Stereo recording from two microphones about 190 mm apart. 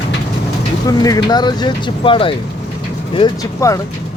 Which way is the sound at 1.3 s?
25° left (ahead or behind).